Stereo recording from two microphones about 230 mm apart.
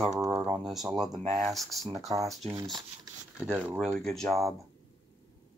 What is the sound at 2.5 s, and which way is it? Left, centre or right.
Speech, centre.